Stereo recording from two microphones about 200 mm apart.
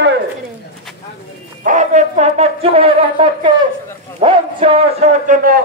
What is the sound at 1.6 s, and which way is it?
A man's voice, 35° right (ahead or behind).